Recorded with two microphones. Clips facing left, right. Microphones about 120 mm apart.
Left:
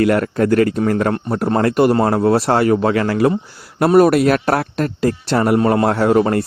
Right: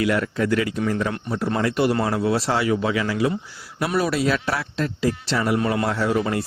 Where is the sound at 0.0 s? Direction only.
50° left (ahead or behind).